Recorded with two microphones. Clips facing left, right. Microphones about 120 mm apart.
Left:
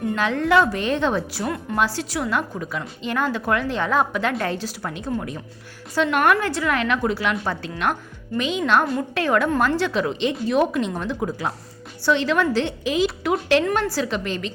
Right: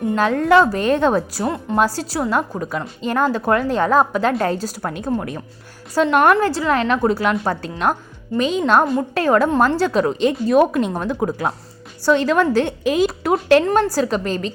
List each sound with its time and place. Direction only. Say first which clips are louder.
0.2 s a woman's voice: right 4 dB; 40° right (ahead or behind)
5.9 s a woman's voice: right 4 dB; 40° right (ahead or behind)